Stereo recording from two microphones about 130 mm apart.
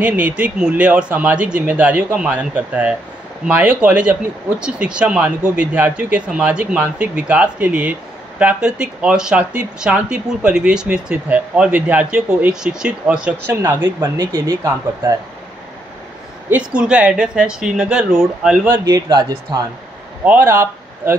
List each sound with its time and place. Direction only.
0.0 s speech: 10° right (ahead or behind)
13.8 s speech: 30° right (ahead or behind)
16.4 s speech: 10° right (ahead or behind)
18.9 s speech: 30° right (ahead or behind)
20.2 s speech: 15° right (ahead or behind)